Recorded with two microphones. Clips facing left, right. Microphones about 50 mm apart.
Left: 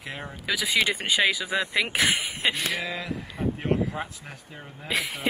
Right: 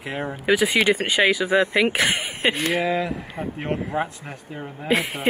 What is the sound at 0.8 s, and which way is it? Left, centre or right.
Speech, centre.